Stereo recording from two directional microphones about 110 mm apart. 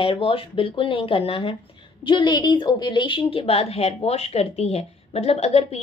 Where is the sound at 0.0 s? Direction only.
55° left (ahead or behind).